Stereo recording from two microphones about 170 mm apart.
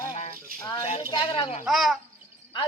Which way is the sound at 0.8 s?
40° left (ahead or behind).